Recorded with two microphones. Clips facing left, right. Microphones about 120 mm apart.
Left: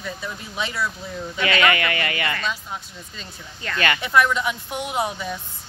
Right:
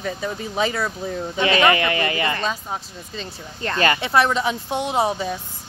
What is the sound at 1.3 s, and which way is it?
Speech, 30° right (ahead or behind).